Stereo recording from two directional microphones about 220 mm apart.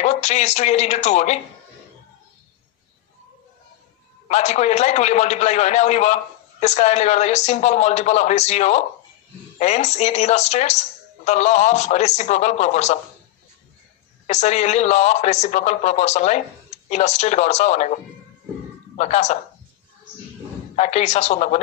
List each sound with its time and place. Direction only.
0.0 s speech: 30° left (ahead or behind)
4.3 s speech: 30° left (ahead or behind)
14.2 s speech: 30° left (ahead or behind)
20.7 s speech: 30° left (ahead or behind)